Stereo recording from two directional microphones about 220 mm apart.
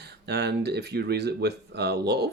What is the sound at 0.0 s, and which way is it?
Speech, 50° right (ahead or behind).